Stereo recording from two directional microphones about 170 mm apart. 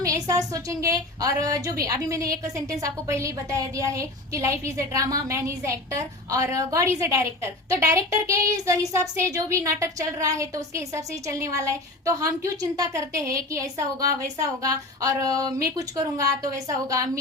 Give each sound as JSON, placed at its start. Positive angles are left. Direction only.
{"t": 0.0, "sound": "a woman's voice", "side_deg": -20}